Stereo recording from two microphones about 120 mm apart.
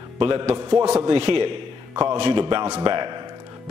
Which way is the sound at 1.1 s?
50° right (ahead or behind).